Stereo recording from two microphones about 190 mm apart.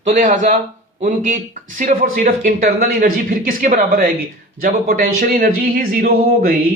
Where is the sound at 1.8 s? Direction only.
45° right (ahead or behind).